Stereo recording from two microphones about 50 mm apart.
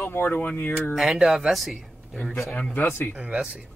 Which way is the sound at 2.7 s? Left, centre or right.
Left.